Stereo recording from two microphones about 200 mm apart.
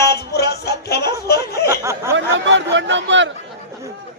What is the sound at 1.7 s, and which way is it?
Speech, 15° right (ahead or behind).